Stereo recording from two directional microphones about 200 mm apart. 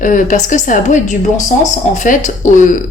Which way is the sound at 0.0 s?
40° left (ahead or behind).